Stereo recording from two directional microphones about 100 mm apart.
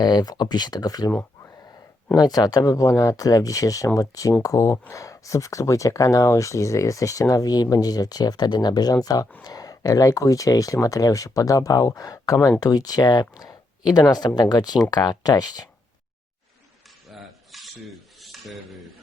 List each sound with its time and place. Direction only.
0.0 s speech: 45° left (ahead or behind)
1.2 s a sound: 30° left (ahead or behind)
2.1 s speech: 40° left (ahead or behind)
17.1 s dishes: centre (ahead or behind)